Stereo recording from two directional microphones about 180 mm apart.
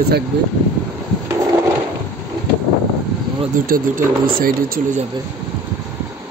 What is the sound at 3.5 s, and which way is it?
Speech, 50° right (ahead or behind).